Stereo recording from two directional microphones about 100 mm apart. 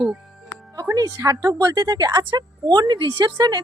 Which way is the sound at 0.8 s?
35° right (ahead or behind).